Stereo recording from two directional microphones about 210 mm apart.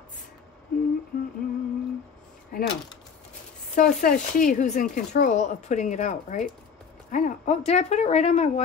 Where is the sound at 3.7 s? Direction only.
40° left (ahead or behind).